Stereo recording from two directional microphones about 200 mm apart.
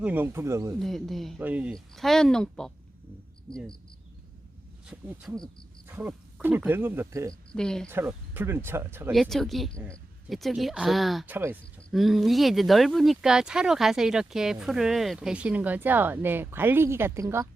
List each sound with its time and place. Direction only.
0.0 s speech: 10° right (ahead or behind)
0.8 s speech: centre (ahead or behind)
4.9 s speech: 5° right (ahead or behind)
7.5 s speech: 5° left (ahead or behind)
7.9 s speech: 10° right (ahead or behind)
9.1 s speech: centre (ahead or behind)